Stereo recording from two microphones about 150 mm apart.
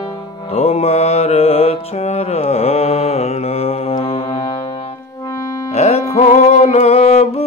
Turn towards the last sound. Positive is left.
turn(degrees=45)  # may be behind; listen again after turning